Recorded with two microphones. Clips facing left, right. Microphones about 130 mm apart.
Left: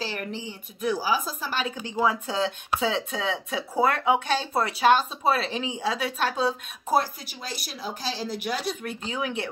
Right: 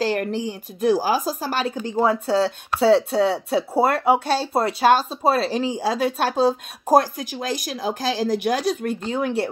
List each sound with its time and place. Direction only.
0.0 s speech: 45° right (ahead or behind)